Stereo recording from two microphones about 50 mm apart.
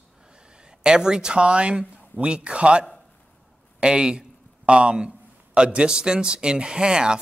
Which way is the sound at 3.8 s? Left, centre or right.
Centre.